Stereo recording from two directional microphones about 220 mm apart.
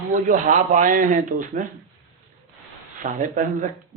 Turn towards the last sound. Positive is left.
turn(degrees=-35)  # may be behind; listen again after turning